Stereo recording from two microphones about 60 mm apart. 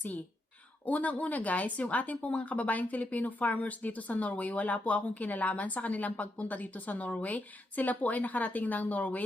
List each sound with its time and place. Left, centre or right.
0.9 s speech: left